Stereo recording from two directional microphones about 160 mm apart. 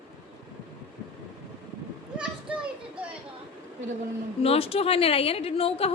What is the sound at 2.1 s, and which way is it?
Children playing, 5° right (ahead or behind).